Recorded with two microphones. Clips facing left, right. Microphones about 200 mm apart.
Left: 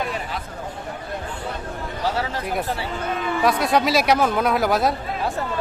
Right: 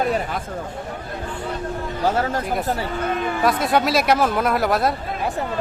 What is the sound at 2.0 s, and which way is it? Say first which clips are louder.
Speech: right 4 dB; 50° right (ahead or behind).